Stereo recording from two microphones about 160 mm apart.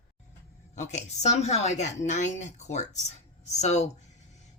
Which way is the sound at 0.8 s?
45° left (ahead or behind).